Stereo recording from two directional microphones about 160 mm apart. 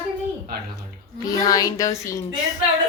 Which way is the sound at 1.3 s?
25° left (ahead or behind).